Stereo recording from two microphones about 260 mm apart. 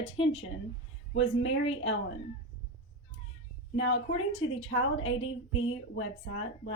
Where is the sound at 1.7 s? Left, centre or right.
Left.